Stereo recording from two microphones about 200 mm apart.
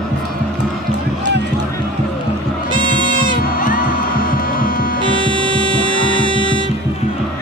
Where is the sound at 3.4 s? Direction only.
45° left (ahead or behind).